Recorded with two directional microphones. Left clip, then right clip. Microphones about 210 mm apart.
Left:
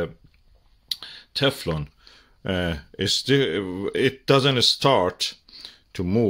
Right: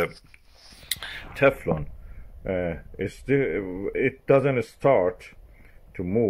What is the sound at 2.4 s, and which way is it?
Speech, 40° left (ahead or behind).